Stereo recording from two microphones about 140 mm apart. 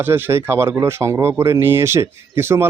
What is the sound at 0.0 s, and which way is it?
Speech, 15° right (ahead or behind).